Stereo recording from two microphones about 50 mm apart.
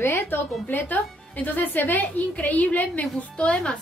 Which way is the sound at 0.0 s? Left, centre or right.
Left.